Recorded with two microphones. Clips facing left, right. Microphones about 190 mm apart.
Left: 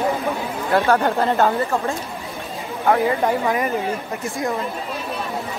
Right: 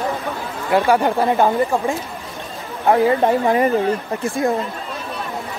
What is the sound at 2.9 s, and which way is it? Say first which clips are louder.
Speech: right 3 dB; 25° right (ahead or behind).